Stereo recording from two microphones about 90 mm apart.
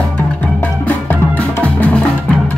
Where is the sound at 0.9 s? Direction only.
20° left (ahead or behind).